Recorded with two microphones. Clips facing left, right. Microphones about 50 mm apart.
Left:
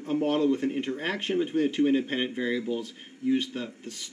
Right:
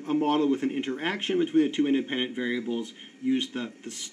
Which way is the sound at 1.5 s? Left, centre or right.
Centre.